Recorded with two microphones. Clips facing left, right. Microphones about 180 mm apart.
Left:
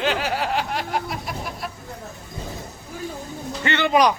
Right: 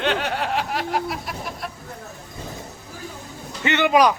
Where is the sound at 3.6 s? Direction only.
15° right (ahead or behind).